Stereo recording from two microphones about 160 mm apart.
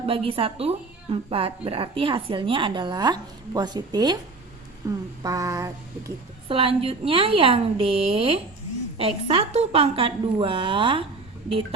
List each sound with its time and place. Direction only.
0.0 s a woman's voice: 35° right (ahead or behind)
4.9 s a sound: 20° right (ahead or behind)
6.5 s a woman's voice: 35° right (ahead or behind)